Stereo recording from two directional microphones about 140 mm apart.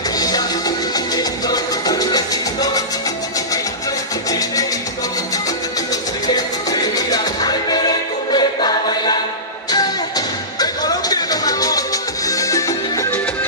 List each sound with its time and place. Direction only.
0.2 s music: 30° left (ahead or behind)
4.3 s music: 25° left (ahead or behind)